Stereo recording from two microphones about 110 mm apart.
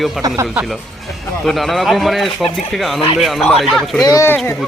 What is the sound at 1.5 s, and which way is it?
Speech, centre (ahead or behind).